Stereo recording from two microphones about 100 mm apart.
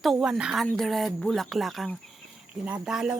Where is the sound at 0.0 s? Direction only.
5° right (ahead or behind).